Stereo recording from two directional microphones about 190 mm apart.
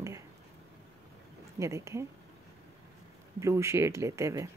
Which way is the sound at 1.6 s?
15° right (ahead or behind).